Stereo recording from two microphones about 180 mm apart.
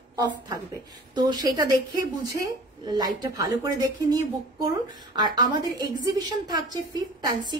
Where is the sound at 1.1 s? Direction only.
20° right (ahead or behind).